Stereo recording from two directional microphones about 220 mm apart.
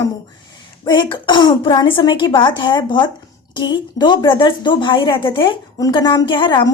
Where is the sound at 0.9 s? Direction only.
20° left (ahead or behind).